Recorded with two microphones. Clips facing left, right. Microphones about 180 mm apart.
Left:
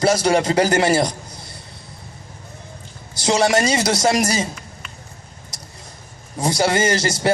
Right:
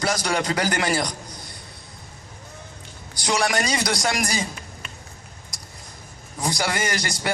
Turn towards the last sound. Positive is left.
turn(degrees=25)  # may be behind; listen again after turning